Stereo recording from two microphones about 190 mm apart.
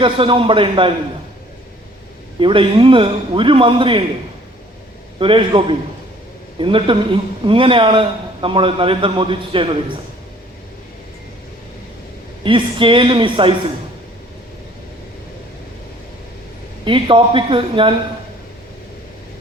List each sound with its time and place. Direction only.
0.0 s a man's voice: 25° right (ahead or behind)
2.4 s a man's voice: 25° right (ahead or behind)
5.2 s a man's voice: 25° right (ahead or behind)
12.4 s a man's voice: 25° right (ahead or behind)
16.8 s a man's voice: 25° right (ahead or behind)